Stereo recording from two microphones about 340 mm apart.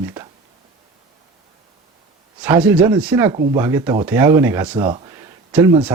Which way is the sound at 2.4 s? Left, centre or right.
Centre.